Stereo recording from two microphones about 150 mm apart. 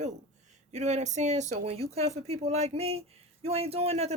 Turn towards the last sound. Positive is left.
turn(degrees=-45)  # may be behind; listen again after turning